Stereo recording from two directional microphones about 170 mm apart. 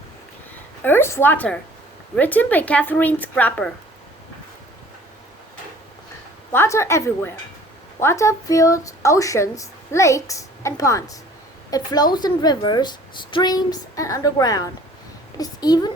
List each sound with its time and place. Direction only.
0.8 s a woman's voice: 10° left (ahead or behind)
6.5 s a woman's voice: 15° left (ahead or behind)